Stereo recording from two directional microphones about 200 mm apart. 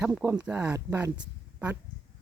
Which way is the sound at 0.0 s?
10° right (ahead or behind).